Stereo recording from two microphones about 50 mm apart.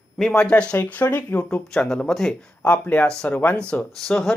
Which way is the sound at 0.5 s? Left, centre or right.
Left.